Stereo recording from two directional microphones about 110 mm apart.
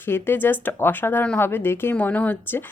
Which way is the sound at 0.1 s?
20° left (ahead or behind).